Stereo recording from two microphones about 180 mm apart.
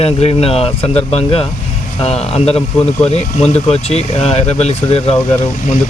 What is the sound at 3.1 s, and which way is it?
Speech, 35° left (ahead or behind).